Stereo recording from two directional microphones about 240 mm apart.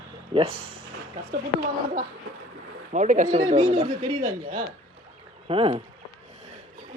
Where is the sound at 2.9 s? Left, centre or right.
Right.